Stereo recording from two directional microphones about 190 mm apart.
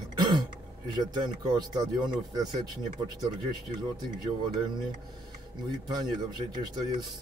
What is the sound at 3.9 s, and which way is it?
Speech, 20° right (ahead or behind).